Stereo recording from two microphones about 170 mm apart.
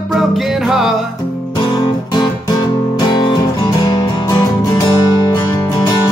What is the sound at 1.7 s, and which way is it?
Music, 25° left (ahead or behind).